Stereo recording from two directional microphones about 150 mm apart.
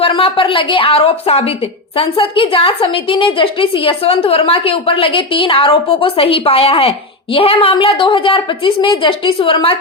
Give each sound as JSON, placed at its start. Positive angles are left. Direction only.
{"t": 0.0, "sound": "a woman's voice", "side_deg": 35}